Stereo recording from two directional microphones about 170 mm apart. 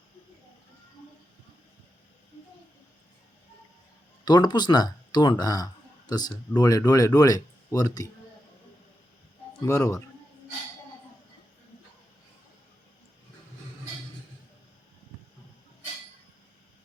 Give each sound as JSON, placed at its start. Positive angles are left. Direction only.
{"t": 4.3, "sound": "speech", "side_deg": 25}
{"t": 9.6, "sound": "speech", "side_deg": 20}